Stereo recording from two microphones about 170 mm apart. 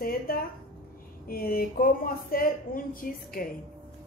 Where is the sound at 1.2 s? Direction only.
60° left (ahead or behind).